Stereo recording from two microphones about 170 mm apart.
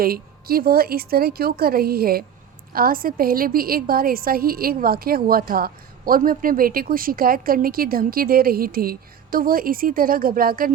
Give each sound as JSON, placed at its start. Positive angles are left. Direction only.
{"t": 0.0, "sound": "a woman's voice", "side_deg": -60}